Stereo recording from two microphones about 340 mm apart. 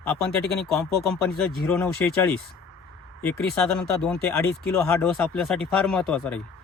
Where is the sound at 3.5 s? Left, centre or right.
Centre.